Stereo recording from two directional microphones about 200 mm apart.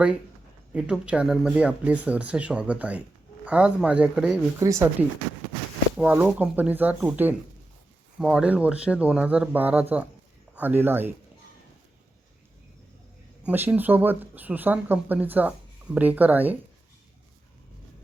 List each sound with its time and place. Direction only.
0.7 s speech: 5° right (ahead or behind)
4.6 s speech: 15° right (ahead or behind)
13.4 s speech: 10° right (ahead or behind)